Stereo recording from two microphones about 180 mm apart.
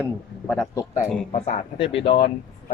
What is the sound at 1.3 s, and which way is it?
Speech, 35° left (ahead or behind).